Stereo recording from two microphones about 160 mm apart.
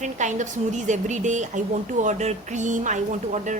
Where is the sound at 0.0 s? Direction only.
50° right (ahead or behind).